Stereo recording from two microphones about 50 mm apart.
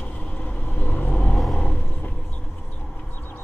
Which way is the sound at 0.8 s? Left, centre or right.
Left.